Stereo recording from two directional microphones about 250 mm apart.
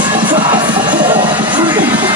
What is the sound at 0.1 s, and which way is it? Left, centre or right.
Music, centre.